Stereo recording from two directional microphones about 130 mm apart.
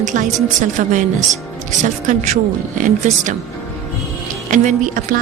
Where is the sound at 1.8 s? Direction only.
70° right (ahead or behind).